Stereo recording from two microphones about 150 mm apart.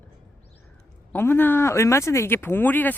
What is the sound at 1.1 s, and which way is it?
Speech, 15° left (ahead or behind).